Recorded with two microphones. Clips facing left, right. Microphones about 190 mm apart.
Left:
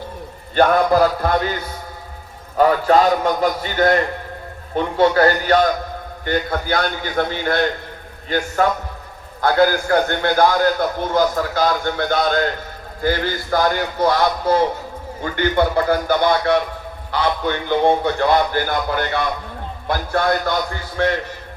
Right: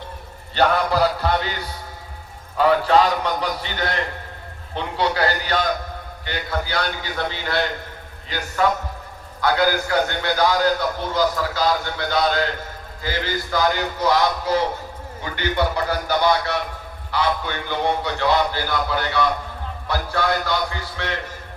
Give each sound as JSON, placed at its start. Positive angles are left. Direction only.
{"t": 0.5, "sound": "a man's voice", "side_deg": 50}